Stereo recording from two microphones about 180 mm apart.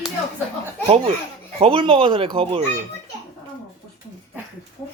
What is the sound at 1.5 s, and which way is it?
Speech, 30° right (ahead or behind).